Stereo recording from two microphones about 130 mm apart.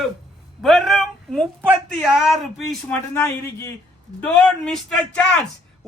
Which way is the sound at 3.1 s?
20° left (ahead or behind).